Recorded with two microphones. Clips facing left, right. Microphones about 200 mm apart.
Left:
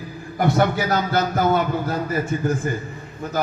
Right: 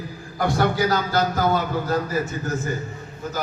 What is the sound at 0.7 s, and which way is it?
Music, 60° left (ahead or behind).